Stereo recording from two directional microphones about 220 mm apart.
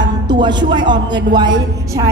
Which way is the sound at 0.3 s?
20° right (ahead or behind).